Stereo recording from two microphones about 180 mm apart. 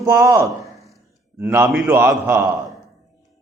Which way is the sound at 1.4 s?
10° right (ahead or behind).